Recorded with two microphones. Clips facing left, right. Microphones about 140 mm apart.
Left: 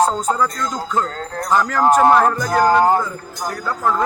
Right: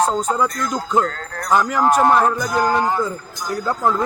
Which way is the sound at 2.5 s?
40° left (ahead or behind).